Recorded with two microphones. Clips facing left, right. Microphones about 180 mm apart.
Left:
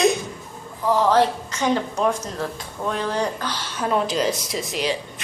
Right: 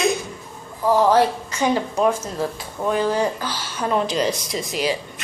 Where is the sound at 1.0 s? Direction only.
10° right (ahead or behind).